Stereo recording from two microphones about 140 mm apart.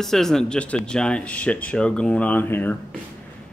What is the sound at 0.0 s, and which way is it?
Speech, 5° left (ahead or behind).